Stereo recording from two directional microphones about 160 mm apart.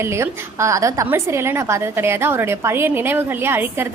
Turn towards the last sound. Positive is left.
turn(degrees=-15)  # may be behind; listen again after turning